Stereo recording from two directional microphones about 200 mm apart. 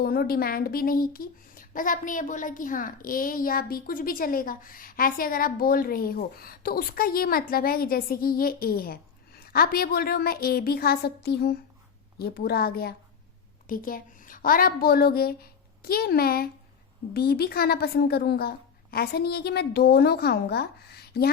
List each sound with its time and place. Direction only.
0.0 s a woman's voice: 50° left (ahead or behind)